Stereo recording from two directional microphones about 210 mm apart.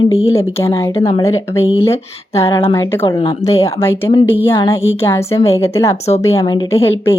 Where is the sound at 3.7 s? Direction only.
10° left (ahead or behind).